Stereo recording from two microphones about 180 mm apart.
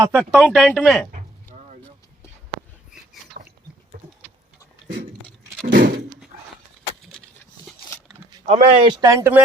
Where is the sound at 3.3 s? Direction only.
50° right (ahead or behind).